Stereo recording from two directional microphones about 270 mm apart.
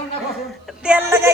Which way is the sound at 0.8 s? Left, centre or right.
Centre.